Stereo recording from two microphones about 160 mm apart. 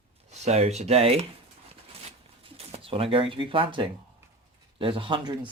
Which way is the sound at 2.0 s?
40° right (ahead or behind).